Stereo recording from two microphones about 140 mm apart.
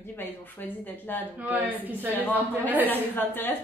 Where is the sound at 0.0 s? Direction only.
15° left (ahead or behind).